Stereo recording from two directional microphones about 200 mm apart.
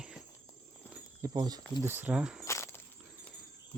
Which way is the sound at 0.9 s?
15° right (ahead or behind).